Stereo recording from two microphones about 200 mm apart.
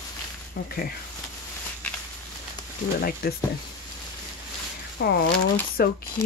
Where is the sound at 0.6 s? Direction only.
50° left (ahead or behind).